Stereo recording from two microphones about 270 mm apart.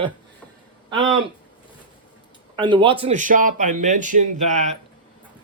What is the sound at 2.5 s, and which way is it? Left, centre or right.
Speech, centre.